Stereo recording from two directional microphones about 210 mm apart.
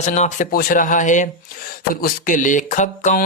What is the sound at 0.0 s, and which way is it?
Speech, 35° left (ahead or behind).